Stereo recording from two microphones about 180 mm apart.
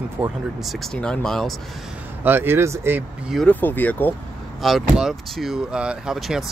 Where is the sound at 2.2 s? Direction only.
10° right (ahead or behind).